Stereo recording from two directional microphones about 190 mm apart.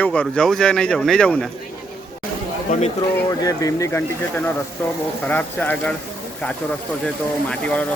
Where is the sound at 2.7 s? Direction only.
35° left (ahead or behind).